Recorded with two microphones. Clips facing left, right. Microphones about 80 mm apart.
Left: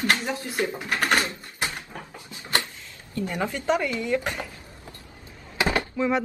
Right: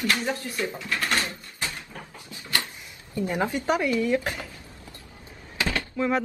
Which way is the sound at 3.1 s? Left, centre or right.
Centre.